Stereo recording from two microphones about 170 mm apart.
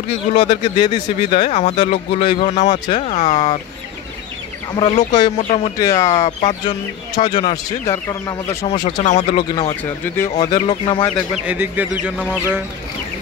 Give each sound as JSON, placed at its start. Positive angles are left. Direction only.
{"t": 0.7, "sound": "speech", "side_deg": 25}
{"t": 1.5, "sound": "speech", "side_deg": 40}
{"t": 4.7, "sound": "speech", "side_deg": 40}
{"t": 5.1, "sound": "speech", "side_deg": 30}
{"t": 6.1, "sound": "speech", "side_deg": 40}
{"t": 7.8, "sound": "speech", "side_deg": 20}
{"t": 8.5, "sound": "speech", "side_deg": 40}
{"t": 9.7, "sound": "speech", "side_deg": 15}
{"t": 10.4, "sound": "speech", "side_deg": 25}
{"t": 11.3, "sound": "a man's voice", "side_deg": -10}